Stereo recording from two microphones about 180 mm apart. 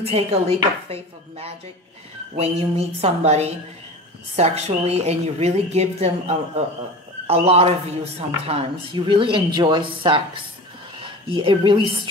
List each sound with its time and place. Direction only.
0.0 s a woman's voice: 35° right (ahead or behind)